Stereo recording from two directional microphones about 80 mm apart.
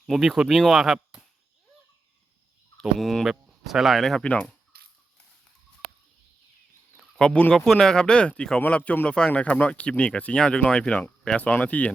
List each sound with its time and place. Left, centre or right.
0.0 s speech: centre
2.8 s speech: centre
4.2 s speech: centre
7.2 s speech: centre